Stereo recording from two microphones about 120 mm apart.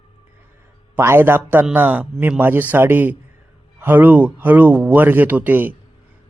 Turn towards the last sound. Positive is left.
turn(degrees=-15)  # may be behind; listen again after turning